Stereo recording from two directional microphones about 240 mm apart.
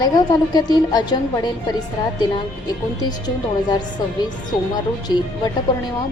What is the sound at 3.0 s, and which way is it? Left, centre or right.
Speech, centre.